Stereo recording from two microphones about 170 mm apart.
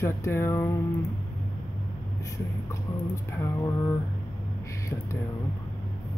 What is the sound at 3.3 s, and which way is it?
Speech, 15° left (ahead or behind).